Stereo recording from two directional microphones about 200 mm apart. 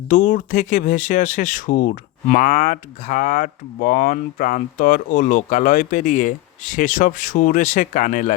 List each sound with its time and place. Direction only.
0.1 s speech: 40° left (ahead or behind)